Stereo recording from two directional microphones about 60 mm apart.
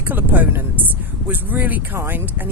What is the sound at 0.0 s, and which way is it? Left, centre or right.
Speech, right.